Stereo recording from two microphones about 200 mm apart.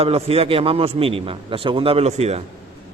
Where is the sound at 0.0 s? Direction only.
30° right (ahead or behind).